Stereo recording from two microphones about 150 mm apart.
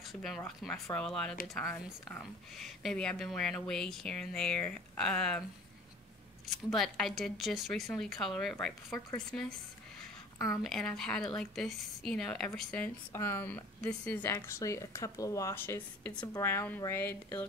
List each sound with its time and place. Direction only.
0.1 s speech: centre (ahead or behind)
6.7 s speech: centre (ahead or behind)
10.6 s a woman's voice: 5° left (ahead or behind)